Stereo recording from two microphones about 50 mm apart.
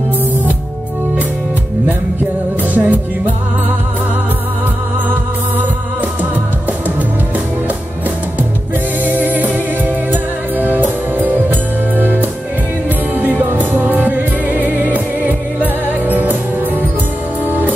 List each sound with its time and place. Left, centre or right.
2.7 s music: right
9.0 s music: right
10.6 s music: right
13.6 s music: right